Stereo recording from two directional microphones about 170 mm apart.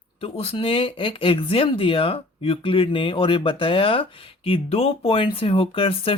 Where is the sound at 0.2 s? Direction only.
35° left (ahead or behind).